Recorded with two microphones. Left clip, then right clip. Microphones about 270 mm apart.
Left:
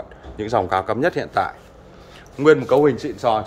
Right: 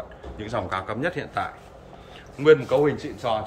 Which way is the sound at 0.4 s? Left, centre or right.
Centre.